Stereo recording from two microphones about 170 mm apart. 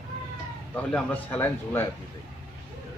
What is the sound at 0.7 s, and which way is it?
A man's voice, 10° left (ahead or behind).